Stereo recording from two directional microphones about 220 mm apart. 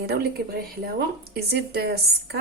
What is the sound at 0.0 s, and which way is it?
A woman's voice, 45° right (ahead or behind).